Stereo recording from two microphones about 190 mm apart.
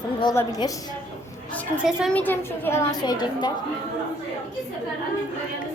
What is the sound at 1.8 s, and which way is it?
Speech, centre (ahead or behind).